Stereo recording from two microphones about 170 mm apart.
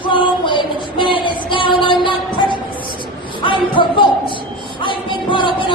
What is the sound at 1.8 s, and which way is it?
Music, 30° left (ahead or behind).